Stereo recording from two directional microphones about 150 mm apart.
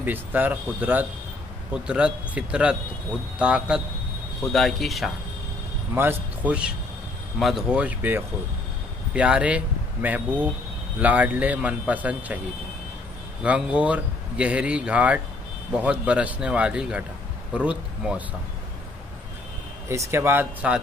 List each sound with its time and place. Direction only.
0.0 s speech: 10° right (ahead or behind)
5.9 s speech: 15° right (ahead or behind)
13.4 s speech: 10° right (ahead or behind)
19.9 s speech: 20° right (ahead or behind)